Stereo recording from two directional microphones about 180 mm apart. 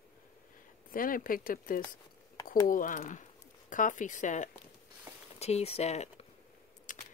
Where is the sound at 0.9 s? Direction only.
50° left (ahead or behind).